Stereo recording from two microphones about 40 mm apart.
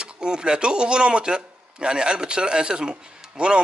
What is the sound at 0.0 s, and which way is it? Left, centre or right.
Speech, right.